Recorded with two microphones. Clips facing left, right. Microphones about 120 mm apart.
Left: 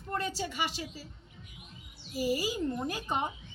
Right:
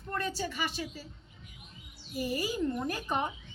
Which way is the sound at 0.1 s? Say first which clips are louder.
Even; 20° left (ahead or behind).